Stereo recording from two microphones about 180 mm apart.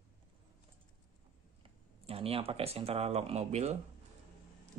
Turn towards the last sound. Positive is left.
turn(degrees=-35)  # may be behind; listen again after turning